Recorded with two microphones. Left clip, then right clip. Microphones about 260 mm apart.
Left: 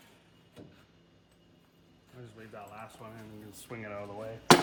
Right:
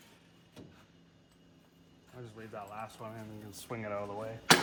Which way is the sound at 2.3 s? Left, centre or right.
Centre.